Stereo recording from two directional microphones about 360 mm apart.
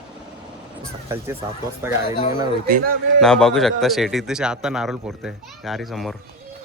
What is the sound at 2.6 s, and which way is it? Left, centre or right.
Speech, right.